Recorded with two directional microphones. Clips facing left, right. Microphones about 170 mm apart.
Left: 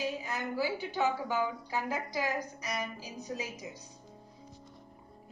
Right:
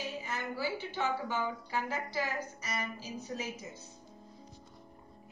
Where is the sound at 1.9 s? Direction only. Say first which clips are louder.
Left 2 dB; 15° left (ahead or behind).